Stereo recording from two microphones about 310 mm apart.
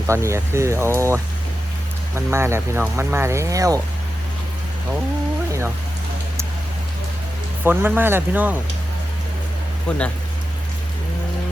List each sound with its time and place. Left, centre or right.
0.1 s speech: centre
5.5 s rain on surface: centre
7.6 s speech: centre